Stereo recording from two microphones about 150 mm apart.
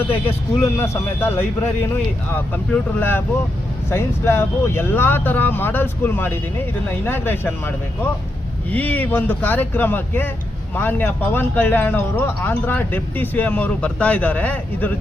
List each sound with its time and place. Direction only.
0.1 s speech: 15° left (ahead or behind)
2.5 s speech: 10° left (ahead or behind)
8.7 s speech: 10° left (ahead or behind)